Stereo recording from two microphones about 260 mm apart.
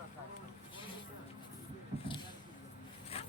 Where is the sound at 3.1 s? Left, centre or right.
Left.